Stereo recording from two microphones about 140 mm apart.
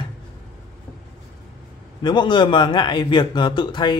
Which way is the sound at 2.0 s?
35° left (ahead or behind).